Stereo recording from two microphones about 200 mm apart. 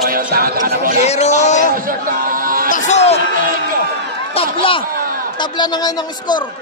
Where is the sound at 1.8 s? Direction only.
45° right (ahead or behind).